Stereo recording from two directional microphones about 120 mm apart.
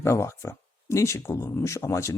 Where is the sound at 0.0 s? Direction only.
25° left (ahead or behind).